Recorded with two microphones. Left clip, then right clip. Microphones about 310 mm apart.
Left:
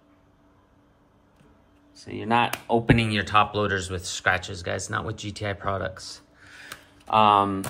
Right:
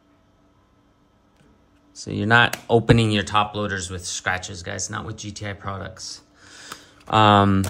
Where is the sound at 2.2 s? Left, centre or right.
Right.